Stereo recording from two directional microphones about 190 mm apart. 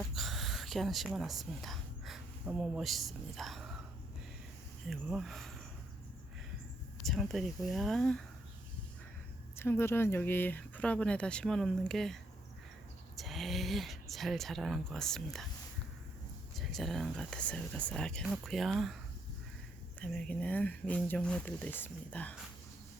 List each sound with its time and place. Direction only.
0.1 s gasp: centre (ahead or behind)
4.9 s speech: centre (ahead or behind)
7.0 s speech: centre (ahead or behind)
9.6 s speech: 10° left (ahead or behind)
16.6 s speech: centre (ahead or behind)
20.0 s speech: 5° left (ahead or behind)